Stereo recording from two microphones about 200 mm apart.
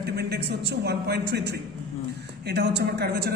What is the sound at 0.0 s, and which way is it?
A woman's voice, 55° right (ahead or behind).